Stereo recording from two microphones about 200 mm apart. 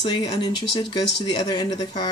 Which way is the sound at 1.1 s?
60° left (ahead or behind).